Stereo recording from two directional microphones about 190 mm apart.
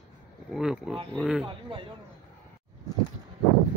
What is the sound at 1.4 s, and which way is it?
Speech, 25° right (ahead or behind).